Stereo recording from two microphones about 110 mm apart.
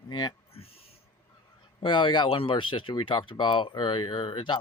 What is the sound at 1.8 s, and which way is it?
Speech, 45° left (ahead or behind).